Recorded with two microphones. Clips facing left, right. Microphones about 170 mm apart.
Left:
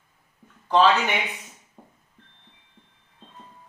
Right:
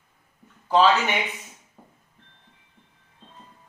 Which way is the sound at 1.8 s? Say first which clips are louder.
Left 3 dB; 15° left (ahead or behind).